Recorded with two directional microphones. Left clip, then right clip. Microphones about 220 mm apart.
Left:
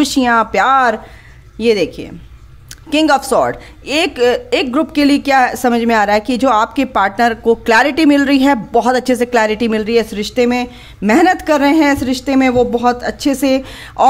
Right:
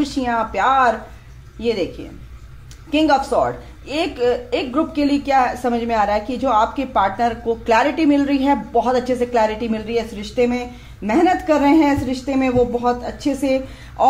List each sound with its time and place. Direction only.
0.0 s a woman's voice: 45° left (ahead or behind)